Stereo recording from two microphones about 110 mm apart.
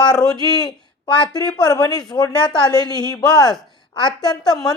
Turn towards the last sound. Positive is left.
turn(degrees=35)  # may be behind; listen again after turning